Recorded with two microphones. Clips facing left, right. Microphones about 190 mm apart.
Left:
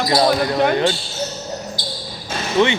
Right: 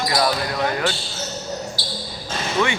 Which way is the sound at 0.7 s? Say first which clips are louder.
Left 6 dB; 25° left (ahead or behind).